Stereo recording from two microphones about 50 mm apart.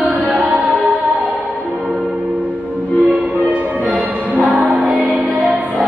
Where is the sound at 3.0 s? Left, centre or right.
Right.